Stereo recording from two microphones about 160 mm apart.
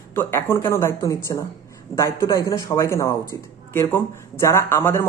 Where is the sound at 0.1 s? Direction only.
15° left (ahead or behind).